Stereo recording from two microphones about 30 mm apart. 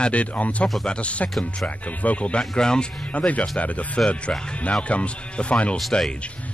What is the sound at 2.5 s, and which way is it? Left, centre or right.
Speech, left.